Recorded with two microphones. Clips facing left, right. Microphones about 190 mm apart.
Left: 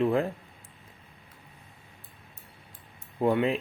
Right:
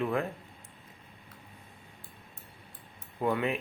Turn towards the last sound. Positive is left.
turn(degrees=30)  # may be behind; listen again after turning